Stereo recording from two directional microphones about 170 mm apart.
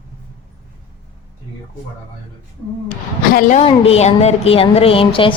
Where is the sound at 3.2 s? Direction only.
55° left (ahead or behind).